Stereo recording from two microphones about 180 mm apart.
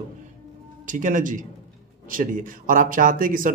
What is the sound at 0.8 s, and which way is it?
Speech, 45° right (ahead or behind).